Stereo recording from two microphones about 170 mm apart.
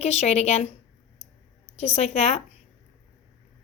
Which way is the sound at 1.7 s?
40° left (ahead or behind).